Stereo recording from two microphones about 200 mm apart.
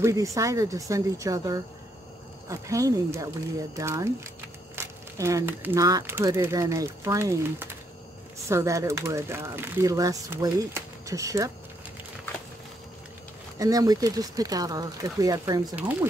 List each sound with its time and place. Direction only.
0.0 s speech: 15° right (ahead or behind)
13.6 s speech: 15° right (ahead or behind)